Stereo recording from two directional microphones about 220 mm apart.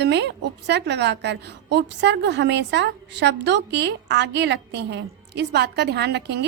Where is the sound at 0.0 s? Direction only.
50° right (ahead or behind).